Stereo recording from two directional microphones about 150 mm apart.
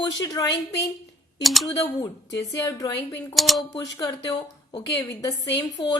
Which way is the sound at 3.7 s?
25° left (ahead or behind).